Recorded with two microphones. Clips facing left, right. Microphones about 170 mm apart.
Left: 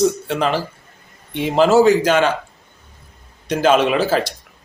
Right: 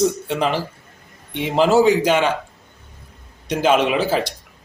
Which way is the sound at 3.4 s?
15° right (ahead or behind).